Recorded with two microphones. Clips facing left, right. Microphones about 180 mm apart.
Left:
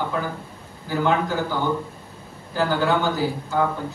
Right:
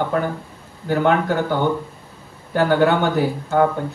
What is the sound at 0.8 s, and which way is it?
A man's voice, 60° right (ahead or behind).